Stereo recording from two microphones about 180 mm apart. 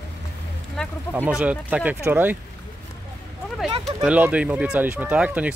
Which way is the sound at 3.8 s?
5° right (ahead or behind).